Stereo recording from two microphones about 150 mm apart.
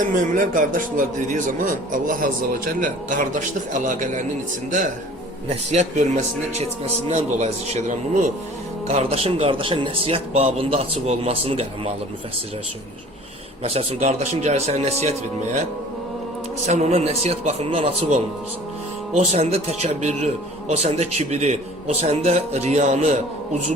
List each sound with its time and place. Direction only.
0.0 s a man's voice: 60° right (ahead or behind)
5.7 s a man's voice: 50° right (ahead or behind)
8.9 s speech: 45° right (ahead or behind)
13.7 s a man's voice: 45° right (ahead or behind)
16.6 s a man's voice: 45° right (ahead or behind)